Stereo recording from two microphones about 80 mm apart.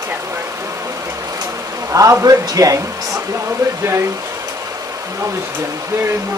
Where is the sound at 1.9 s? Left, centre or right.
Right.